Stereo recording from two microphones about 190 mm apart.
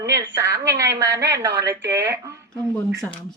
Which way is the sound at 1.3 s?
15° right (ahead or behind).